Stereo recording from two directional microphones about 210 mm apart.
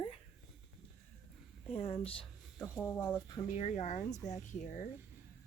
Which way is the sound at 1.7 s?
25° left (ahead or behind).